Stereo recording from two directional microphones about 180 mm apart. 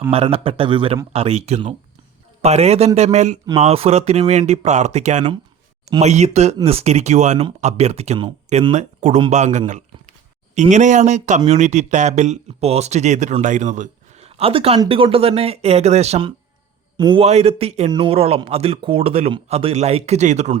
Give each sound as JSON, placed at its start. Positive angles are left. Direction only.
{"t": 0.1, "sound": "a man's voice", "side_deg": -30}